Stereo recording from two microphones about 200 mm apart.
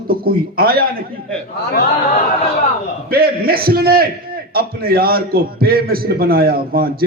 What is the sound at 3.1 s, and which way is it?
A man's voice, 50° right (ahead or behind).